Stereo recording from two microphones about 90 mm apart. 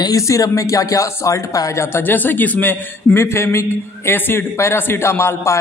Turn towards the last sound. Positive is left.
turn(degrees=30)  # may be behind; listen again after turning